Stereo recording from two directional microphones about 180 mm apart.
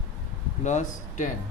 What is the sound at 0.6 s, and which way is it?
Speech, 40° left (ahead or behind).